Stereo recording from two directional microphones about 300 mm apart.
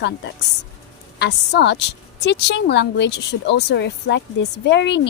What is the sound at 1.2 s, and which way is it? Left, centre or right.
Speech, left.